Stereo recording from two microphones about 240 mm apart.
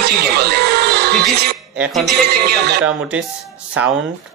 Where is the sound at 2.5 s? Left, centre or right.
Right.